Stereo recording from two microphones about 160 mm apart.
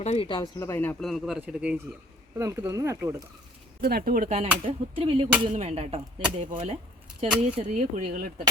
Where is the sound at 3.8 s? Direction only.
70° right (ahead or behind).